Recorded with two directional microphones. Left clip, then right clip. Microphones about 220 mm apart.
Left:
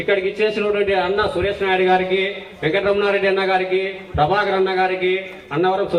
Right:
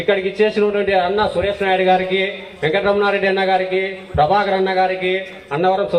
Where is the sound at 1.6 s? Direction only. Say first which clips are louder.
Right 1 dB; 40° right (ahead or behind).